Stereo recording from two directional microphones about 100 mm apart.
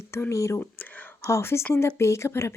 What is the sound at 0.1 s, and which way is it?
A woman's voice, 30° left (ahead or behind).